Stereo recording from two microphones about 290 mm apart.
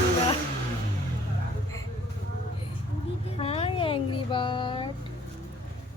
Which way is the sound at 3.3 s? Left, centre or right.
Centre.